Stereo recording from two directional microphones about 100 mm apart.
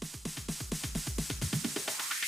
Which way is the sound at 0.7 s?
Centre (ahead or behind).